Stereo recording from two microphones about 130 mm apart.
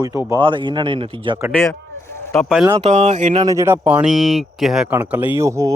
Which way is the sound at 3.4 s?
25° right (ahead or behind).